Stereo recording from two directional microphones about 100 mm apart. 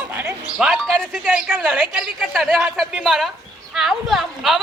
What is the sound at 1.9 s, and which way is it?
A woman's voice, centre (ahead or behind).